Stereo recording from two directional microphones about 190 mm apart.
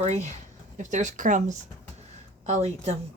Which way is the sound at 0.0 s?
35° right (ahead or behind).